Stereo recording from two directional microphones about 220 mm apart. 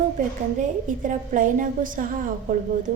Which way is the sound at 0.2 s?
35° right (ahead or behind).